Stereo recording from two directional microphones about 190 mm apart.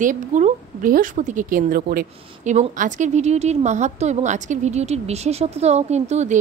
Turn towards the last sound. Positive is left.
turn(degrees=-35)  # may be behind; listen again after turning